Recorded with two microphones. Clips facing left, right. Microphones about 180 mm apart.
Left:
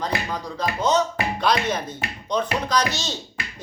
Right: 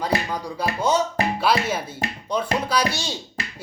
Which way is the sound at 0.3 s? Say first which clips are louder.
Right 1 dB; 10° right (ahead or behind).